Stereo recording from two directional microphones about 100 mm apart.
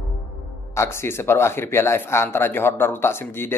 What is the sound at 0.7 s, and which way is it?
Speech, 25° left (ahead or behind).